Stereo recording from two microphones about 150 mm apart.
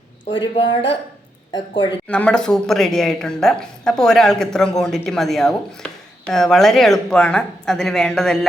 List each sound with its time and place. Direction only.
0.3 s speech: 30° left (ahead or behind)
2.0 s a woman's voice: 10° left (ahead or behind)